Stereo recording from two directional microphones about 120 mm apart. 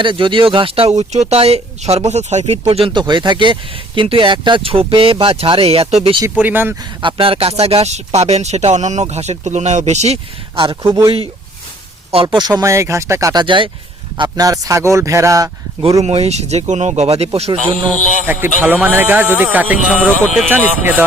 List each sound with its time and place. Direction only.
0.0 s speech: 45° right (ahead or behind)
6.4 s speech: 15° right (ahead or behind)
7.0 s speech: 50° right (ahead or behind); by 10.2 s 70° right (ahead or behind)
10.5 s speech: 45° right (ahead or behind)
12.1 s speech: 45° right (ahead or behind); by 13.4 s 25° right (ahead or behind)
13.4 s speech: 40° right (ahead or behind)
14.2 s speech: 30° right (ahead or behind)
16.0 s speech: 60° right (ahead or behind)
18.3 s speech: 15° right (ahead or behind)